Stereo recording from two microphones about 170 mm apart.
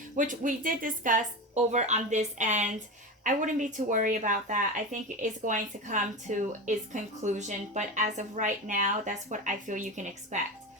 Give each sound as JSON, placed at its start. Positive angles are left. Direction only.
{"t": 0.2, "sound": "a woman's voice", "side_deg": -50}